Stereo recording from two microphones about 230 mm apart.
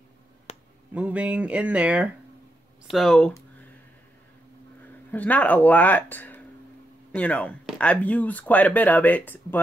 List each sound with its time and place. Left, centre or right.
0.5 s a sound: left
0.9 s speech: centre
5.1 s speech: centre